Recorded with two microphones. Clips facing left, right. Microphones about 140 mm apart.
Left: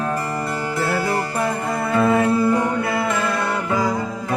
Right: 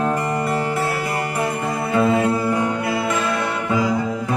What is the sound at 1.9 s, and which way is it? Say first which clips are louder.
Mantra: left 1 dB; 15° right (ahead or behind).